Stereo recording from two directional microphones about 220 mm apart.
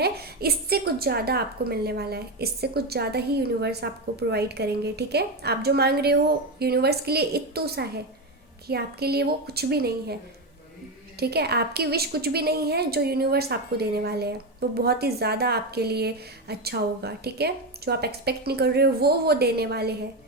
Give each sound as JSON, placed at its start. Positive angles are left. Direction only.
{"t": 0.0, "sound": "a woman's voice", "side_deg": -45}
{"t": 11.2, "sound": "a woman's voice", "side_deg": -45}